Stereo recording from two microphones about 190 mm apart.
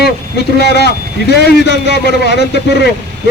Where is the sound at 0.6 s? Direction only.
60° left (ahead or behind).